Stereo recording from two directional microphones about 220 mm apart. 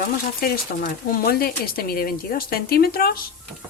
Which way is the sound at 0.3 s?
45° left (ahead or behind).